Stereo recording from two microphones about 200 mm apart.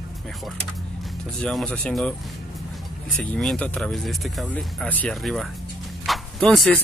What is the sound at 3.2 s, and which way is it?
Speech, 5° left (ahead or behind).